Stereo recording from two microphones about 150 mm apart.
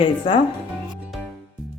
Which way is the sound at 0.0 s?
35° left (ahead or behind).